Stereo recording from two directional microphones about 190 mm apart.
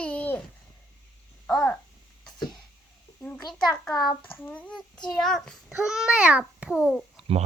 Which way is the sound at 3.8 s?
Centre (ahead or behind).